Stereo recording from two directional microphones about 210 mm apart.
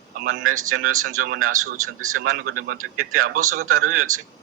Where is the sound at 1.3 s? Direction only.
80° right.